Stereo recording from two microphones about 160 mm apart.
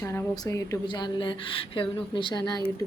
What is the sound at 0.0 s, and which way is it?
A woman's voice, 15° left (ahead or behind).